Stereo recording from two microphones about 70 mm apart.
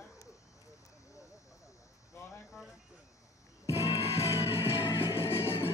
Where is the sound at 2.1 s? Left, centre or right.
Left.